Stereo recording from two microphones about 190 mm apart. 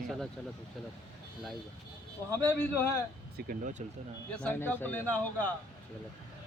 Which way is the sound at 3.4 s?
55° right (ahead or behind).